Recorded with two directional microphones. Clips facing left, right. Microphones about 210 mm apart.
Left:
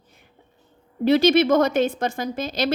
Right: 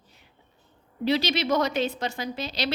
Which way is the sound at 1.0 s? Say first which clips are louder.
Left 8 dB; 50° left (ahead or behind).